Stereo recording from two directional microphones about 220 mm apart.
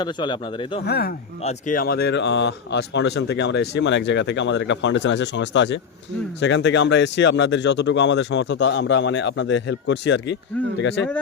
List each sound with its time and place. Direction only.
0.0 s speech: 20° left (ahead or behind)
0.9 s speech: 45° left (ahead or behind)